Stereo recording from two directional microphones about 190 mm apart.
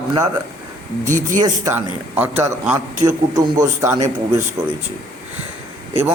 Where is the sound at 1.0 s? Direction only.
40° right (ahead or behind).